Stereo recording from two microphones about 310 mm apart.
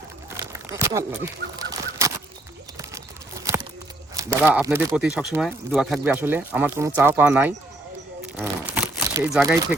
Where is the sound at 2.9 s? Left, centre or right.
Centre.